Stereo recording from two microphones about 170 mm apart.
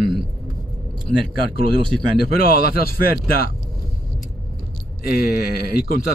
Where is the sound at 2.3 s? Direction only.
60° left (ahead or behind).